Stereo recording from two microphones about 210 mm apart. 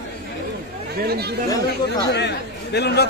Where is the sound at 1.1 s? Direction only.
50° right (ahead or behind).